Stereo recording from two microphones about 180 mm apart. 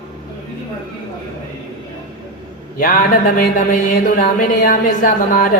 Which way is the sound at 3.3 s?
50° left (ahead or behind).